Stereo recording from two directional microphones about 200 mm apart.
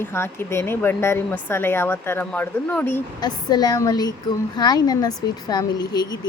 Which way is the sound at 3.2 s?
20° left (ahead or behind).